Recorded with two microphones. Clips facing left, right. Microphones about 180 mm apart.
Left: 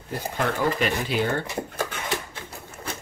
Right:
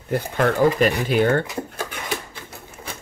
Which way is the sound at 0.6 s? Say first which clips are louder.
Right 7 dB; 45° right (ahead or behind).